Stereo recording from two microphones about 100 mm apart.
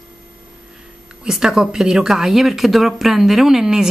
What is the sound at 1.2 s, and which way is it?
Speech, 5° right (ahead or behind).